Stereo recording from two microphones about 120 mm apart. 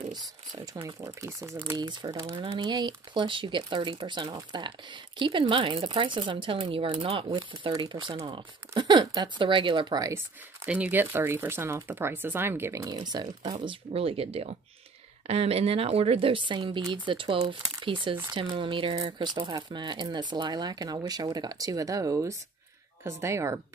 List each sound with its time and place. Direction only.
0.1 s speech: 30° right (ahead or behind)
10.1 s speech: 15° right (ahead or behind)